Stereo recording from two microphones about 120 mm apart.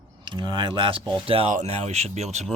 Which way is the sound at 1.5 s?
65° right (ahead or behind).